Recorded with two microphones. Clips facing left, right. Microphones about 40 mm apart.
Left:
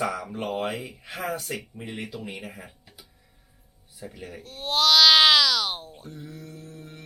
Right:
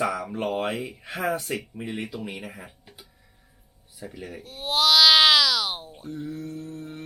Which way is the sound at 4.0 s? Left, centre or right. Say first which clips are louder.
Right 2 dB; centre.